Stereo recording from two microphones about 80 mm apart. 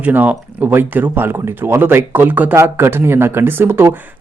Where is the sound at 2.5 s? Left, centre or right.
Right.